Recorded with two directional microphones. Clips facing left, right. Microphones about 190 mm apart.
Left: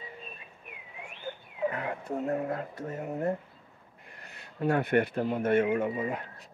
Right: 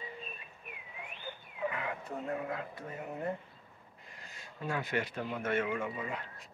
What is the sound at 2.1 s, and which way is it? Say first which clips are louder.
Speech: left 7 dB; 45° left (ahead or behind).